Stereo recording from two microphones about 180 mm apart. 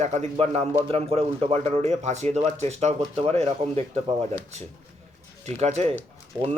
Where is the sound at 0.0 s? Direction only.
40° right (ahead or behind).